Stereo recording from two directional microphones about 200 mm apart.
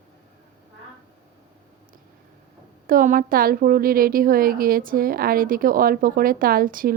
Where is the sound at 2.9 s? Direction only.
45° right (ahead or behind).